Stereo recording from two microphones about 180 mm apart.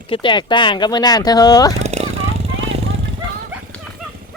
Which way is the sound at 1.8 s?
35° right (ahead or behind).